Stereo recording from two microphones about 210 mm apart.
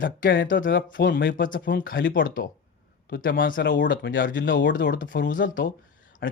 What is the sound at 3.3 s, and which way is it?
Speech, 40° left (ahead or behind).